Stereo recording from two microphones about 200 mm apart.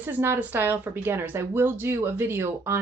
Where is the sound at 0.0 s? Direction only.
10° right (ahead or behind).